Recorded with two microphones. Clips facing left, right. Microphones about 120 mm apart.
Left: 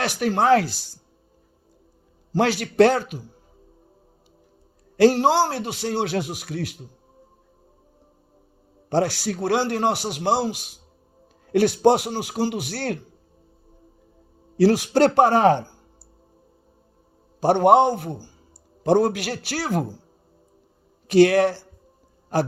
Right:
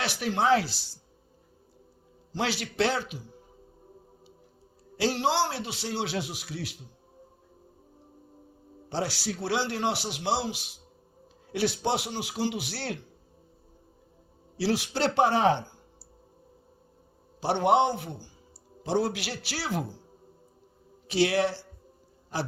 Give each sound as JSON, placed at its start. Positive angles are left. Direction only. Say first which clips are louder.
{"t": 0.0, "sound": "a man's voice", "louder": "left 6 dB", "side_deg": 45}
{"t": 2.3, "sound": "a man's voice", "louder": "left 9 dB", "side_deg": 50}
{"t": 4.9, "sound": "a man's voice", "louder": "left 9 dB", "side_deg": 50}
{"t": 8.9, "sound": "a man's voice", "louder": "left 9 dB", "side_deg": 50}
{"t": 14.5, "sound": "a man's voice", "louder": "left 10 dB", "side_deg": 50}
{"t": 17.4, "sound": "a man's voice", "louder": "left 8 dB", "side_deg": 45}
{"t": 21.1, "sound": "a man's voice", "louder": "left 9 dB", "side_deg": 50}